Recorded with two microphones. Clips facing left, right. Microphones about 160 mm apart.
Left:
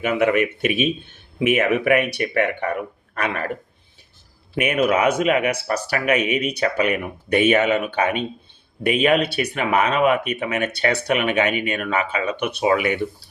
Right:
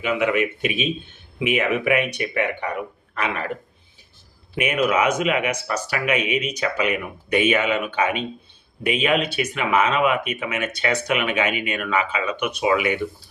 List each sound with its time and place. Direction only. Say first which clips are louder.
0.0 s speech: left 2 dB; 40° left (ahead or behind)
4.5 s speech: left 2 dB; 50° left (ahead or behind)
4.9 s speech: left 2 dB; 35° left (ahead or behind)
8.9 s speech: left 3 dB; 40° left (ahead or behind)